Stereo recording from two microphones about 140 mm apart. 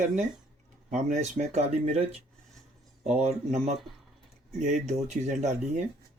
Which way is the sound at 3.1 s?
50° right (ahead or behind).